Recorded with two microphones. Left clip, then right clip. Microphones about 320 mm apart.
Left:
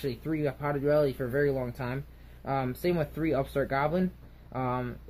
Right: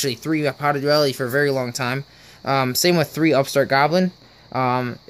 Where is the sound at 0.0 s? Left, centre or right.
Right.